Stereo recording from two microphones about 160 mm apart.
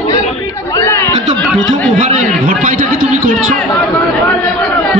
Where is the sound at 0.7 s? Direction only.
15° left (ahead or behind).